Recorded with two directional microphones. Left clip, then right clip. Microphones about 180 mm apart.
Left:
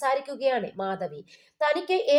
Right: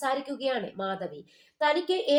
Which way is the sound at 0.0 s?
20° left (ahead or behind).